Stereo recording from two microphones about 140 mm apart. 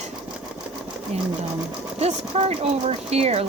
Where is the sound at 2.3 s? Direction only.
45° right (ahead or behind).